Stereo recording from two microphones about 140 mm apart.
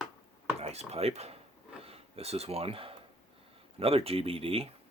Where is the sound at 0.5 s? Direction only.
50° right (ahead or behind).